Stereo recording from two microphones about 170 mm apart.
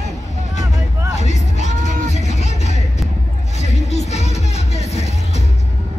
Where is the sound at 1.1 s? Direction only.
40° left (ahead or behind).